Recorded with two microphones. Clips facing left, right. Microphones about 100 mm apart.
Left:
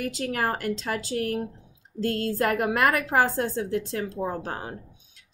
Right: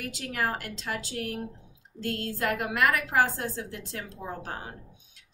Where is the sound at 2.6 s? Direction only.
40° left (ahead or behind).